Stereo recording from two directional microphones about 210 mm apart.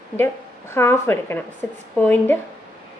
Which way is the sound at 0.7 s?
10° left (ahead or behind).